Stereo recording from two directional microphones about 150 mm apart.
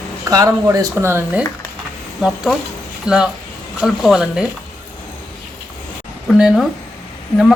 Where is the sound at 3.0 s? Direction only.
5° right (ahead or behind).